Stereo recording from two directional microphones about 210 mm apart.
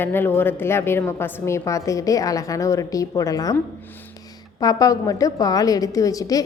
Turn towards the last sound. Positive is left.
turn(degrees=15)  # may be behind; listen again after turning